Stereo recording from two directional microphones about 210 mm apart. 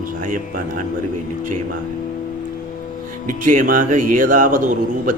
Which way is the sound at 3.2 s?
40° right (ahead or behind).